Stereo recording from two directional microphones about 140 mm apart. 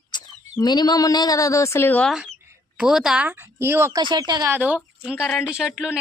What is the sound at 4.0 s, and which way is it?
Speech, 35° right (ahead or behind).